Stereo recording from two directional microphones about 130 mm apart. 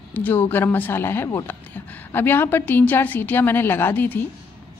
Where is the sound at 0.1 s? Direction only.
15° left (ahead or behind).